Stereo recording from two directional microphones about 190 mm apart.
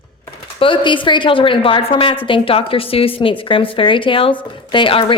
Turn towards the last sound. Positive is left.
turn(degrees=25)  # may be behind; listen again after turning